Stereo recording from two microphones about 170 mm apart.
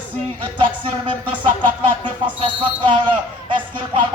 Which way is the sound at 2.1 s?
30° right (ahead or behind).